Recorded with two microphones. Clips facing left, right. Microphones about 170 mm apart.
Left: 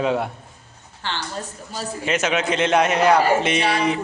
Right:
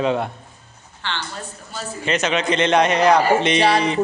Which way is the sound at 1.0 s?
40° left (ahead or behind).